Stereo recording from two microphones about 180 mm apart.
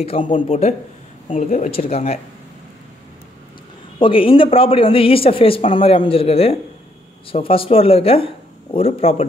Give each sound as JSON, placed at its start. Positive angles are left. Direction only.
{"t": 0.0, "sound": "speech", "side_deg": 40}
{"t": 1.3, "sound": "speech", "side_deg": 45}
{"t": 4.0, "sound": "speech", "side_deg": 30}